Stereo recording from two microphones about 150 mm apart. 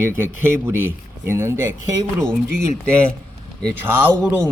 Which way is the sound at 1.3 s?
15° right (ahead or behind).